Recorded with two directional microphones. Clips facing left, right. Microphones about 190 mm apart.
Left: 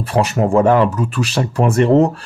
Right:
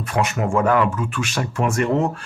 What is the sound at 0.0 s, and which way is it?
Speech, 35° left (ahead or behind).